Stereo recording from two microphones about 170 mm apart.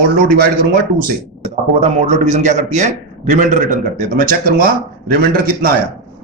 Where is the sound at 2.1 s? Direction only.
45° right (ahead or behind).